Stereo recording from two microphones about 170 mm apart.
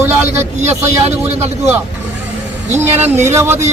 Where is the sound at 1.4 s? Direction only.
10° right (ahead or behind).